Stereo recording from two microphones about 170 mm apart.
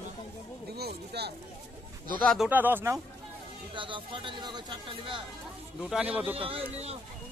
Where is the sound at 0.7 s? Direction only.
70° right (ahead or behind).